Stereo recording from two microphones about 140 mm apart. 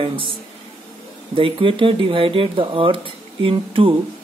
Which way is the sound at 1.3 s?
40° right (ahead or behind).